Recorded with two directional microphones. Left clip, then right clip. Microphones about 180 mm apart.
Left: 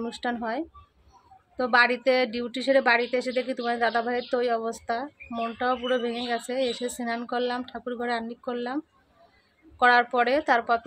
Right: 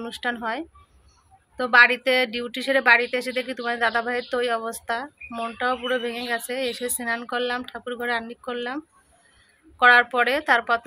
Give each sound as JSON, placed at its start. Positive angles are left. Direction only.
{"t": 0.0, "sound": "speech", "side_deg": 20}